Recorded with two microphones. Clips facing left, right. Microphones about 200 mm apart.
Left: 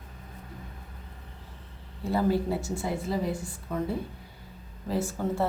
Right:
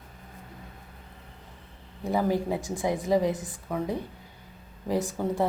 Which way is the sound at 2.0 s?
15° right (ahead or behind).